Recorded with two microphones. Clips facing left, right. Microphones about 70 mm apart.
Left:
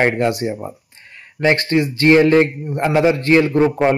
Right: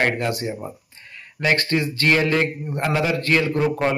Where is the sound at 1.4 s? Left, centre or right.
Left.